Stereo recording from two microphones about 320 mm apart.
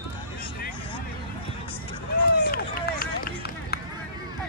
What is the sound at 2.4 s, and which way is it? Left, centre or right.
Run, left.